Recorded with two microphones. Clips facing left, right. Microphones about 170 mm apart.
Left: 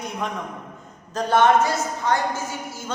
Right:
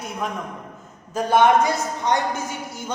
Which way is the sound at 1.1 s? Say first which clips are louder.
Right 1 dB; 10° right (ahead or behind).